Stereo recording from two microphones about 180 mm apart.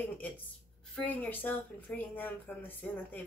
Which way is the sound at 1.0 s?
10° left (ahead or behind).